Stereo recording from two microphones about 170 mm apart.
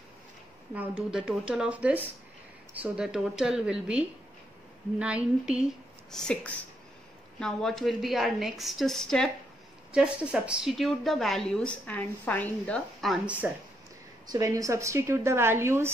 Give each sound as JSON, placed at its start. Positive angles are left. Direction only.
{"t": 0.7, "sound": "a woman's voice", "side_deg": -5}
{"t": 6.1, "sound": "a sound", "side_deg": 5}
{"t": 7.3, "sound": "a woman's voice", "side_deg": 5}
{"t": 14.3, "sound": "a woman's voice", "side_deg": -20}